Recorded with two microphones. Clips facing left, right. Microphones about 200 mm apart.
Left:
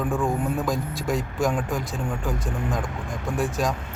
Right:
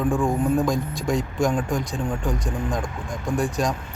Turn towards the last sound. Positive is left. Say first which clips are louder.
# right 2 dB
turn(degrees=0)  # may be behind; listen again after turning